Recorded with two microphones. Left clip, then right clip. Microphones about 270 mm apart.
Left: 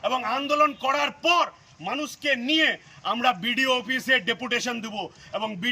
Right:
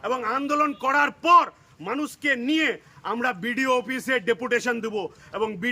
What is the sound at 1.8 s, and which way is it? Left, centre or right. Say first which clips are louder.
A man's voice: right 1 dB; centre.